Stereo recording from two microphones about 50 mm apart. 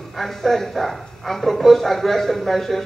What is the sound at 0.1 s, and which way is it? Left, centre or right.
A man's voice, centre.